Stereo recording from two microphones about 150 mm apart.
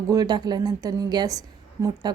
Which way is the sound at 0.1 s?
25° right (ahead or behind).